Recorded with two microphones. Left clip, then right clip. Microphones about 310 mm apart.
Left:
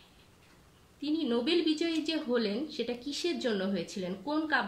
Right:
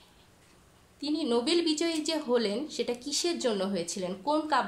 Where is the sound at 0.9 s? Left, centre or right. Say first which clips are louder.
Right 3 dB; centre.